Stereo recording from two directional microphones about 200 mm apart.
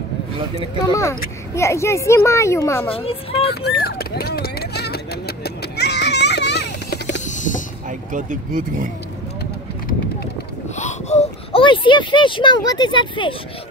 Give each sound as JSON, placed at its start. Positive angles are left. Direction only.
{"t": 0.7, "sound": "a child's voice", "side_deg": 15}
{"t": 2.9, "sound": "speech", "side_deg": 30}
{"t": 3.4, "sound": "vehicle", "side_deg": 55}
{"t": 7.2, "sound": "vehicle", "side_deg": 40}
{"t": 8.1, "sound": "speech", "side_deg": -40}
{"t": 10.8, "sound": "speech", "side_deg": 35}